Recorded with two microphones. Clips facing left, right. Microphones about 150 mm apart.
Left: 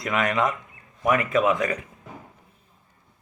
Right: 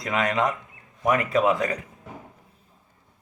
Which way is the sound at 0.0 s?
35° right (ahead or behind).